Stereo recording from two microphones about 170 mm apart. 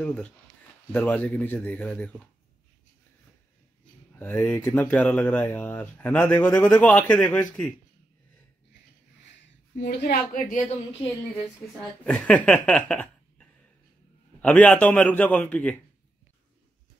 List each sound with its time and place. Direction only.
0.0 s speech: 5° left (ahead or behind)
4.2 s speech: 10° left (ahead or behind)
9.8 s a woman's voice: 85° left; by 11.0 s 45° left (ahead or behind)
12.0 s speech: 10° left (ahead or behind)